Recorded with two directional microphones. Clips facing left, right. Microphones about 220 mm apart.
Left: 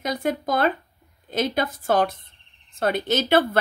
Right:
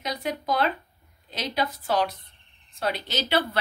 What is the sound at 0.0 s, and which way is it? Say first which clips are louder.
Speech: left 5 dB; 50° left (ahead or behind).